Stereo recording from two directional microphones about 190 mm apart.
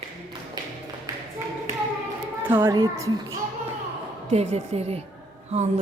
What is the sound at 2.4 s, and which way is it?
Speech, 15° right (ahead or behind).